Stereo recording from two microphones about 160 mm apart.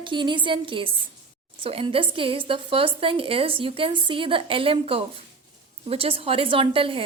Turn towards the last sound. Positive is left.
turn(degrees=-35)  # may be behind; listen again after turning